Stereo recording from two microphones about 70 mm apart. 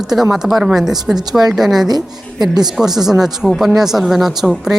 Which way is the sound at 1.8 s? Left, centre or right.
Right.